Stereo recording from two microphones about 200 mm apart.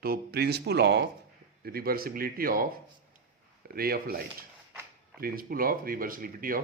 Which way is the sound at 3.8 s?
50° right (ahead or behind).